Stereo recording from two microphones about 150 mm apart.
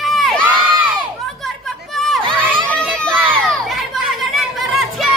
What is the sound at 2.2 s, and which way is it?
Crowd, 35° right (ahead or behind).